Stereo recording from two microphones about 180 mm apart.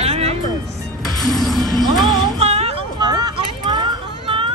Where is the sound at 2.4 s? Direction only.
35° right (ahead or behind).